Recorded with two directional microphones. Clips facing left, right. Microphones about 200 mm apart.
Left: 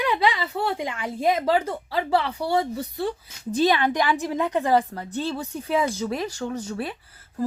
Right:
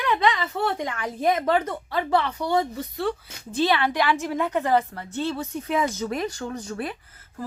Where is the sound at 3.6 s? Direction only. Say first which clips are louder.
Left 1 dB; 15° left (ahead or behind).